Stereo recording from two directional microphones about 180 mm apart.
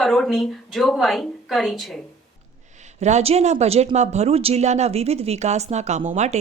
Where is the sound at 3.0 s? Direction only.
40° right (ahead or behind).